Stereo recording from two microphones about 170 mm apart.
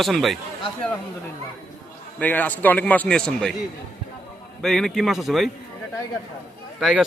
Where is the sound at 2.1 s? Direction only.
10° left (ahead or behind).